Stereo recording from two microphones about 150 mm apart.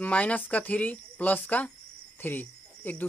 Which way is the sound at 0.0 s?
10° left (ahead or behind).